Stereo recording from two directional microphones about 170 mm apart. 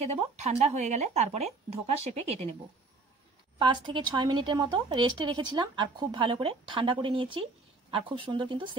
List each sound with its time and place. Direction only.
0.0 s speech: 40° right (ahead or behind)
3.5 s speech: 30° right (ahead or behind)